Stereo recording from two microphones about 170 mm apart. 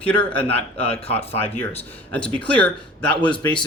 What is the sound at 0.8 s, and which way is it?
Speech, 35° left (ahead or behind).